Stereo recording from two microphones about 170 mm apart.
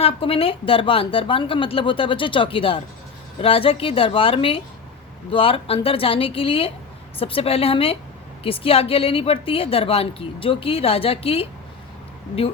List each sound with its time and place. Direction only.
0.0 s a woman's voice: 35° left (ahead or behind)